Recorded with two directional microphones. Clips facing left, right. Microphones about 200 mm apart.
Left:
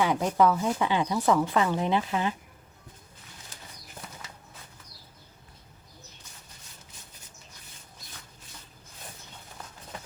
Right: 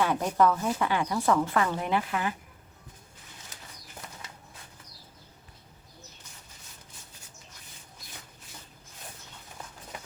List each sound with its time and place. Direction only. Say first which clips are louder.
0.0 s speech: left 1 dB; 15° left (ahead or behind)